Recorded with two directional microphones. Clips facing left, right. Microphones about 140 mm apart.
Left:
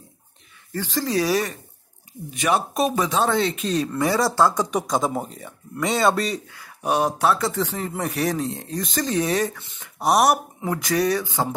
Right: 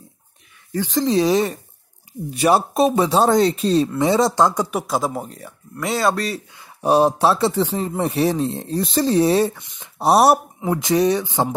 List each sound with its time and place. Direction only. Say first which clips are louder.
0.7 s speech: right 6 dB; 15° right (ahead or behind)
2.3 s speech: right 5 dB; 35° right (ahead or behind); by 4.6 s 20° right (ahead or behind)
4.6 s speech: right 1 dB; 5° right (ahead or behind)
6.5 s speech: right 10 dB; 25° right (ahead or behind)